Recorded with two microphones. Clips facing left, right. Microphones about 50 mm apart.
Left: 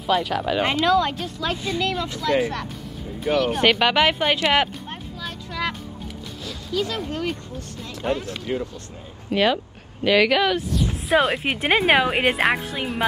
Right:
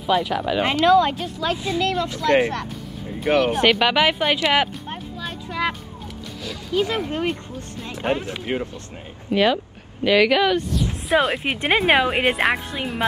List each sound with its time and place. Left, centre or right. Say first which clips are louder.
0.0 s speech: right 1 dB; centre
2.5 s music: right 2 dB; centre
3.3 s speech: right 1 dB; centre
5.5 s speech: right 3 dB; centre
6.4 s speech: right 3 dB; right
8.5 s speech: right 1 dB; right
9.3 s speech: right 1 dB; centre